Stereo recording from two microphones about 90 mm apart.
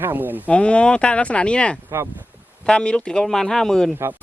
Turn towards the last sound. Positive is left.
turn(degrees=5)  # may be behind; listen again after turning